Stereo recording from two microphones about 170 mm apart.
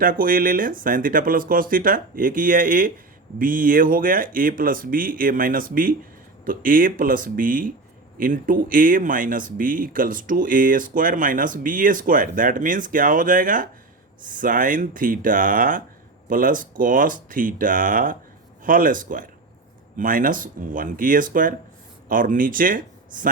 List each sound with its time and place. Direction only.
0.0 s speech: 55° right (ahead or behind)